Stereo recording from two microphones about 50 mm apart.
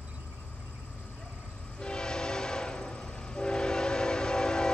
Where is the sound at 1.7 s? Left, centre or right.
Centre.